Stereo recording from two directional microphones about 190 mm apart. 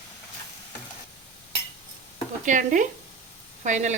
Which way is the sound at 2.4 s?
40° right (ahead or behind).